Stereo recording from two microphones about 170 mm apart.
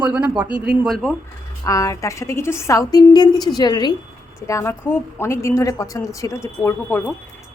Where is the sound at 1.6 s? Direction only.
20° left (ahead or behind).